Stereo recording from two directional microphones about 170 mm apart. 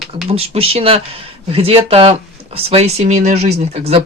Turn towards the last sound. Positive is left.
turn(degrees=-40)  # may be behind; listen again after turning